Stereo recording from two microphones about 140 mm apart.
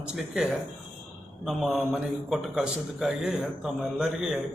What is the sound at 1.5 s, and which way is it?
Speech, centre (ahead or behind).